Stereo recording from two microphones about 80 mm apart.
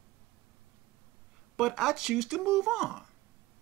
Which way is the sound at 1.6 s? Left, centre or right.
Centre.